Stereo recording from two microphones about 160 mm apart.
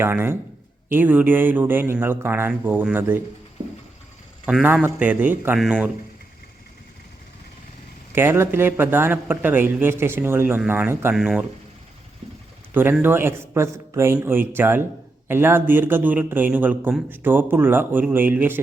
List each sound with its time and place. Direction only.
0.0 s speech: 15° right (ahead or behind)
4.4 s speech: 10° right (ahead or behind)
5.5 s speech: centre (ahead or behind)
8.1 s speech: 15° right (ahead or behind)
11.1 s speech: 5° right (ahead or behind)
12.2 s engine: 40° right (ahead or behind)
12.7 s speech: 15° right (ahead or behind)